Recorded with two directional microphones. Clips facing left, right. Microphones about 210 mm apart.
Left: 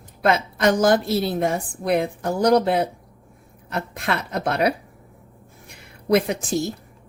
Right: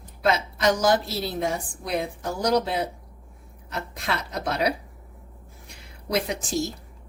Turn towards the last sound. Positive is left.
turn(degrees=60)  # may be behind; listen again after turning